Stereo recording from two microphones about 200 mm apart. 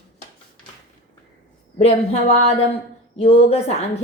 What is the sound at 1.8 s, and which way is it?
A woman's voice, 30° left (ahead or behind).